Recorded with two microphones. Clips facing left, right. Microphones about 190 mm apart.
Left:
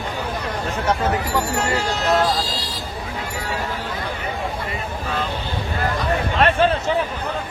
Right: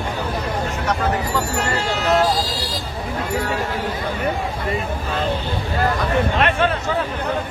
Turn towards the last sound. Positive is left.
turn(degrees=35)  # may be behind; listen again after turning